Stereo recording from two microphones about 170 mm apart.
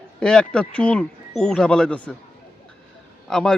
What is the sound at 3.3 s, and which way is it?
Speech, 5° left (ahead or behind).